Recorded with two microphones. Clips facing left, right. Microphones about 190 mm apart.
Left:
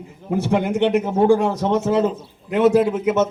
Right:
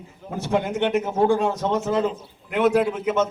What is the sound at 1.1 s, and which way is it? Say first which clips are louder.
Speech: left 4 dB; 30° left (ahead or behind).